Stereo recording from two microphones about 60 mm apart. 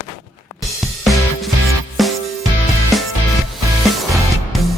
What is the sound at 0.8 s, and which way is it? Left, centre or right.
Music, centre.